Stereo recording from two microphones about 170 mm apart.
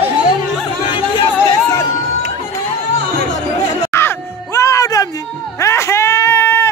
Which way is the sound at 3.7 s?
15° left (ahead or behind).